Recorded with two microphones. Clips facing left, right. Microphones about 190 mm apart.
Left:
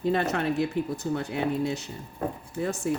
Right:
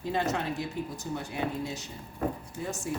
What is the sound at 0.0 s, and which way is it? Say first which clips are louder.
Speech: left 5 dB; 65° left (ahead or behind).